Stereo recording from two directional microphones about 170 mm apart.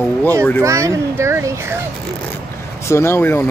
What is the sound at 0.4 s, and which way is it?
Speech, 10° left (ahead or behind).